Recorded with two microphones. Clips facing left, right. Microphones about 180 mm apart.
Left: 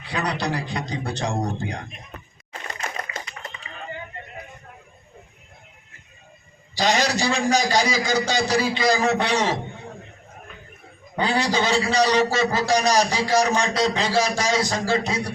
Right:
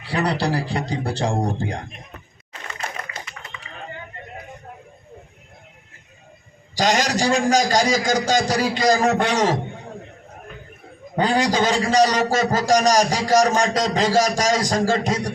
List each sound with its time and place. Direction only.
0.0 s a man's voice: 30° right (ahead or behind)
6.7 s a man's voice: 45° right (ahead or behind)
11.2 s a man's voice: 45° right (ahead or behind)